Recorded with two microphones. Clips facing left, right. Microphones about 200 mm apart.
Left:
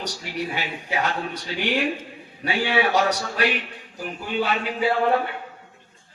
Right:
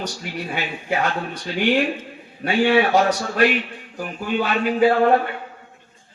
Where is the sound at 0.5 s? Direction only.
50° right (ahead or behind).